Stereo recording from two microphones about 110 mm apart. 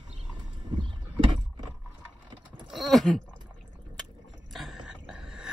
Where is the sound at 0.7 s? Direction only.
50° right (ahead or behind).